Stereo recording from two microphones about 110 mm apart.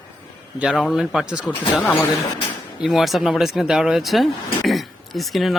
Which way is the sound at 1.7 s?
20° left (ahead or behind).